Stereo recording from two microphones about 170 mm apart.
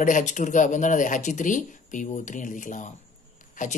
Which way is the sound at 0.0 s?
45° left (ahead or behind).